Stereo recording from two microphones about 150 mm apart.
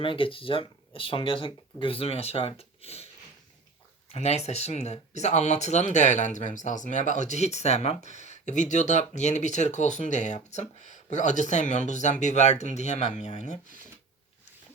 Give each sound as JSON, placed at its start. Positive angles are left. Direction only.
{"t": 0.0, "sound": "speech", "side_deg": 35}
{"t": 4.1, "sound": "speech", "side_deg": 45}